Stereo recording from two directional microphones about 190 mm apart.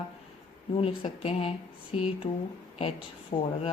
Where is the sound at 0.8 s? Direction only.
30° left (ahead or behind).